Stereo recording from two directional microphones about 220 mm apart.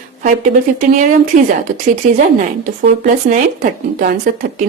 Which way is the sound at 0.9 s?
35° right (ahead or behind).